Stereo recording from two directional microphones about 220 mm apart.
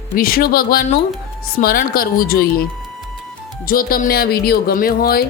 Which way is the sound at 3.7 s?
40° left (ahead or behind).